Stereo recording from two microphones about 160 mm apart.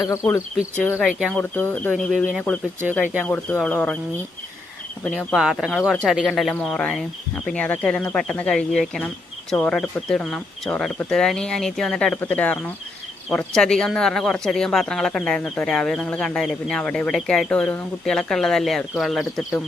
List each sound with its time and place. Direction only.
0.0 s speech: 15° left (ahead or behind)
0.9 s speech: centre (ahead or behind)
1.4 s speech: 10° left (ahead or behind)
5.0 s speech: centre (ahead or behind)